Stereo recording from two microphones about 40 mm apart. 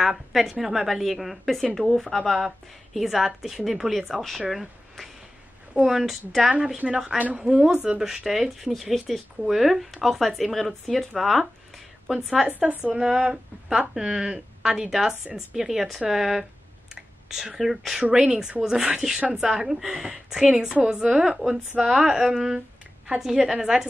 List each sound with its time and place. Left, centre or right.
0.0 s a woman's voice: centre
1.8 s a woman's voice: centre
6.8 s a woman's voice: centre
12.4 s a woman's voice: right